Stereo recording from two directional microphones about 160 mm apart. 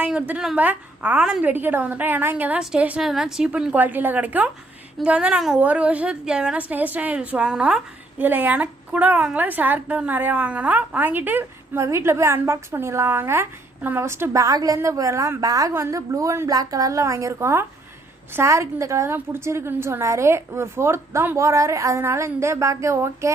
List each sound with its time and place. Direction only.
0.0 s a woman's voice: 10° right (ahead or behind)